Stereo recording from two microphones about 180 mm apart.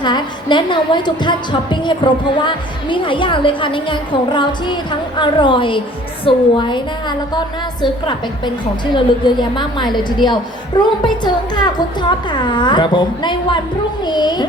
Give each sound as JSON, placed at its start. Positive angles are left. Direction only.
{"t": 0.0, "sound": "a woman's voice", "side_deg": 25}